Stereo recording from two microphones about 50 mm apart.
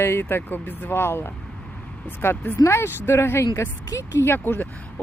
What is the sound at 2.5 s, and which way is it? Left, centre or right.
Speech, left.